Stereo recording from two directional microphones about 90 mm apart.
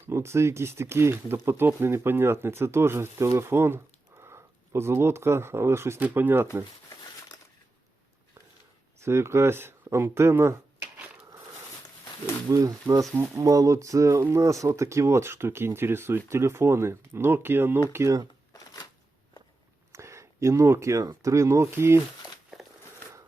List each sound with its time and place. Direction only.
0.1 s speech: 30° right (ahead or behind)
9.0 s speech: 30° right (ahead or behind)
12.5 s speech: 40° right (ahead or behind)
18.5 s shuffling cards: 45° left (ahead or behind)
19.9 s speech: 30° right (ahead or behind)